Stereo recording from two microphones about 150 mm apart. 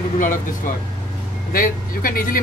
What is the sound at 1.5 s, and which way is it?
Speech, 70° left (ahead or behind).